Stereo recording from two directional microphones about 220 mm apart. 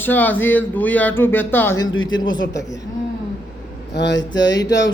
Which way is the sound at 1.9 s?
65° left (ahead or behind).